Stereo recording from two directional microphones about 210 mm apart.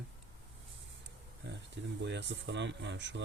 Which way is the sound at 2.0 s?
55° right (ahead or behind).